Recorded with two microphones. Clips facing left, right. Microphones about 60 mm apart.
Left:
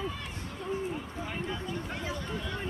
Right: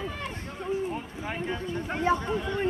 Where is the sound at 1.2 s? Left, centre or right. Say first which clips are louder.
Right 5 dB; right.